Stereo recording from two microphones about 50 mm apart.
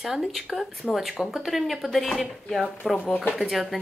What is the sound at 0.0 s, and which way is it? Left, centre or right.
Speech, centre.